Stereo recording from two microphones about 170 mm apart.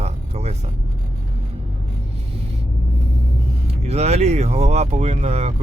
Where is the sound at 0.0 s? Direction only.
40° right (ahead or behind).